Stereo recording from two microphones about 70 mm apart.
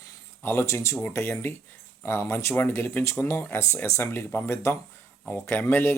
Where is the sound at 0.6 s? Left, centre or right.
Left.